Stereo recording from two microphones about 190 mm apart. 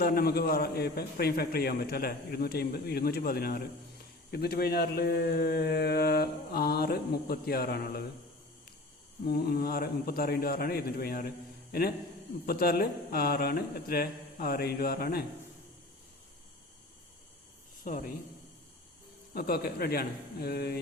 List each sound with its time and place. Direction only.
0.0 s speech: 55° left (ahead or behind)
9.2 s a man's voice: 55° left (ahead or behind)
19.3 s speech: 55° left (ahead or behind)